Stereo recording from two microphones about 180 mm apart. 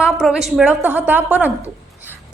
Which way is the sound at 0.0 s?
5° right (ahead or behind).